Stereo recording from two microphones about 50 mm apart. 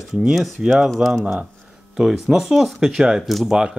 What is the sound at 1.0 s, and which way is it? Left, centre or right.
Speech, right.